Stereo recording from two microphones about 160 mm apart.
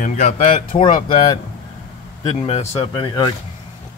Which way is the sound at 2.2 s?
40° left (ahead or behind).